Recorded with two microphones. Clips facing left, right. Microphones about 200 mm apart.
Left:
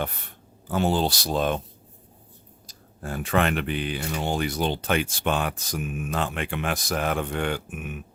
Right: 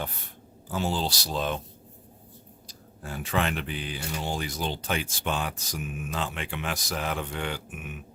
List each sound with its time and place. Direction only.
0.7 s speech: 60° left (ahead or behind)
2.6 s speech: 50° left (ahead or behind)